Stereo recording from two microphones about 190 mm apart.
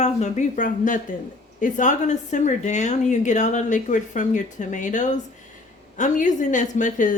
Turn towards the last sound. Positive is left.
turn(degrees=40)  # may be behind; listen again after turning